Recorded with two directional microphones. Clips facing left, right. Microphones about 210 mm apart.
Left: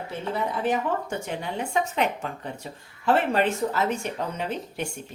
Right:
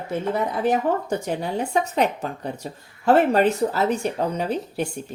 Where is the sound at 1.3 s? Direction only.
40° right (ahead or behind).